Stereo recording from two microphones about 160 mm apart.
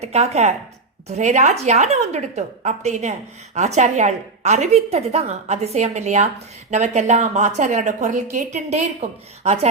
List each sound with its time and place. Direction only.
0.0 s a woman's voice: 45° right (ahead or behind)